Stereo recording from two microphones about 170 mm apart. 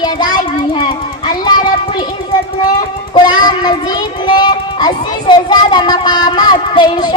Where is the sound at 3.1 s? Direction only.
25° left (ahead or behind).